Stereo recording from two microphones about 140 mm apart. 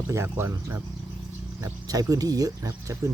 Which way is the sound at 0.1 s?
20° right (ahead or behind).